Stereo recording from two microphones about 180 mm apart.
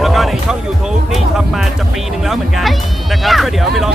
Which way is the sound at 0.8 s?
Centre (ahead or behind).